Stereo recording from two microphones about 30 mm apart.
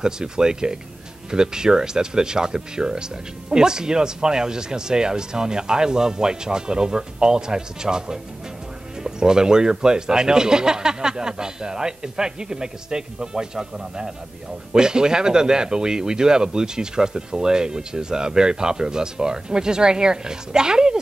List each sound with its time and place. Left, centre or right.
0.0 s speech: right